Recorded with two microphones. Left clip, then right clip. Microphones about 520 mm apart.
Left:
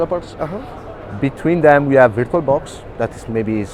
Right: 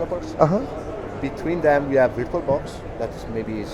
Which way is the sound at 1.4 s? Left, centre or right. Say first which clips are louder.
Left 7 dB; left.